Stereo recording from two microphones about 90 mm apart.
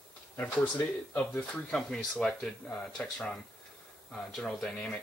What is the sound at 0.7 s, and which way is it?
Speech, 20° left (ahead or behind).